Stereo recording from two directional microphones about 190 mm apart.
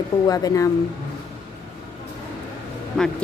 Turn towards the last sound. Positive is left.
turn(degrees=5)  # may be behind; listen again after turning